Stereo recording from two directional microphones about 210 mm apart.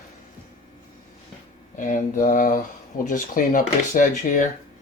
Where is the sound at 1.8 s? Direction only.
40° left (ahead or behind).